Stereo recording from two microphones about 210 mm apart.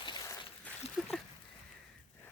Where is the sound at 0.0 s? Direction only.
20° left (ahead or behind).